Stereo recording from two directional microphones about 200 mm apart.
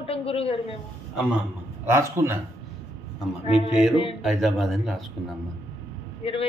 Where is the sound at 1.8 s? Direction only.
15° right (ahead or behind).